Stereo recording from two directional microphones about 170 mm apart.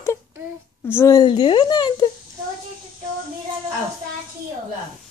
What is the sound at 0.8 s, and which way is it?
Speech, 15° left (ahead or behind).